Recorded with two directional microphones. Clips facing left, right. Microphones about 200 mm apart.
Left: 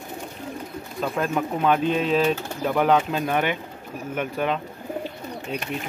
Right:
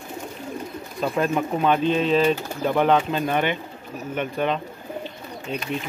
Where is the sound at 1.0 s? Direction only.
5° right (ahead or behind).